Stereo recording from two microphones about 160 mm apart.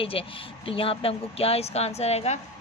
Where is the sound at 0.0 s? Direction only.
35° left (ahead or behind).